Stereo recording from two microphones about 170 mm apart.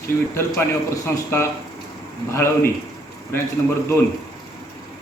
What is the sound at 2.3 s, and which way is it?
Speech, 15° left (ahead or behind).